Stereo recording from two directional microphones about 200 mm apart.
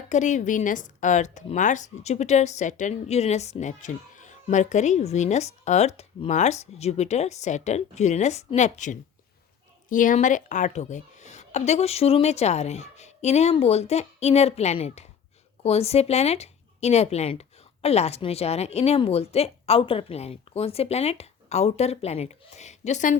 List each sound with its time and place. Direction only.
0.1 s speech: 35° left (ahead or behind)